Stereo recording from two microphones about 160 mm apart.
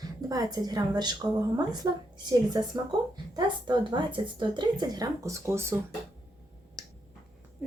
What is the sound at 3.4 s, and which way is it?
Speech, 30° right (ahead or behind).